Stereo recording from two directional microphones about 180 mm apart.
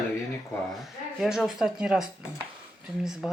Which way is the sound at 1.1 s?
Centre (ahead or behind).